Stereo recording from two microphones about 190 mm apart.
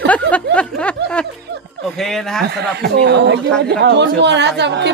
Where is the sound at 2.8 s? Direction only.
60° right (ahead or behind).